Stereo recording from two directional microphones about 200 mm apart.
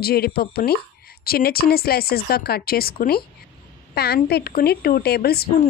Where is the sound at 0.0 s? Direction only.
50° left (ahead or behind).